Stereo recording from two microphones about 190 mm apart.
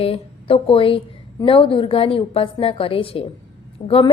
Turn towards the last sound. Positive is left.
turn(degrees=30)  # may be behind; listen again after turning